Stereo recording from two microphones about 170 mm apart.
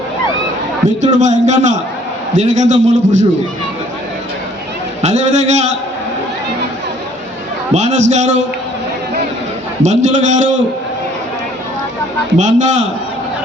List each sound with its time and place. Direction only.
1.0 s a man's voice: 45° right (ahead or behind)
5.0 s a man's voice: 45° right (ahead or behind)
7.7 s a man's voice: 45° right (ahead or behind)
9.8 s a man's voice: 45° right (ahead or behind)
12.4 s a man's voice: 45° right (ahead or behind)